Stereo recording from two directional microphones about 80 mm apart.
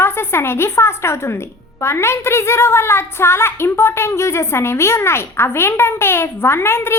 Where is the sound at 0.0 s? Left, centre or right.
Left.